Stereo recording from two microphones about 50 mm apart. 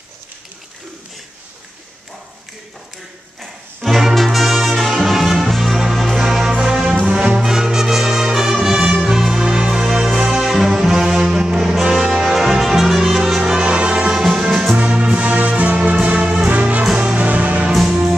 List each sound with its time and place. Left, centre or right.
3.3 s brass instrument: centre
6.5 s music: centre
10.3 s brass instrument: centre
14.8 s music: right
16.9 s music: centre
17.2 s music: right